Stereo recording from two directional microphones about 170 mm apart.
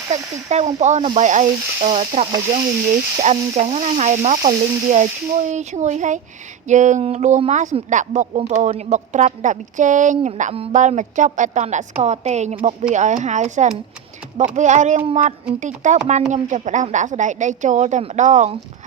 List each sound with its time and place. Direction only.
0.1 s frying: 40° right (ahead or behind)